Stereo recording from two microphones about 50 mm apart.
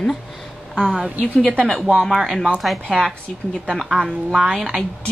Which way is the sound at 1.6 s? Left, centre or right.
Centre.